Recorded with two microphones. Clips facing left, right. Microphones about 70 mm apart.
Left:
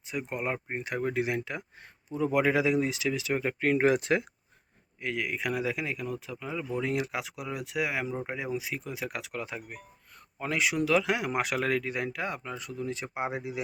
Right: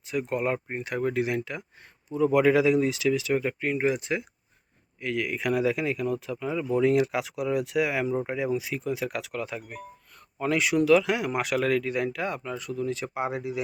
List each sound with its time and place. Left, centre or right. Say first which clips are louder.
0.0 s speech: right 6 dB; centre
3.6 s speech: left 2 dB; left
4.9 s speech: right 3 dB; left
10.8 s speech: right 6 dB; left